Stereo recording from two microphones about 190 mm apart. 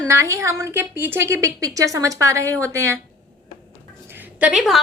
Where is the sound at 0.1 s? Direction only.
15° right (ahead or behind).